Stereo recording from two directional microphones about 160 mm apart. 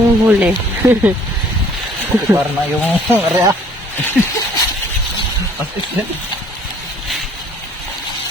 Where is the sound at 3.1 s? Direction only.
20° right (ahead or behind).